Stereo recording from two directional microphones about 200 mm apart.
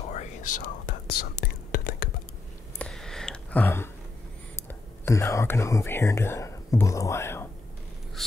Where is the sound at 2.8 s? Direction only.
Centre (ahead or behind).